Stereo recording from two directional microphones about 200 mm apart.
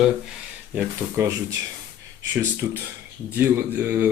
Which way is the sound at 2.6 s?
5° right (ahead or behind).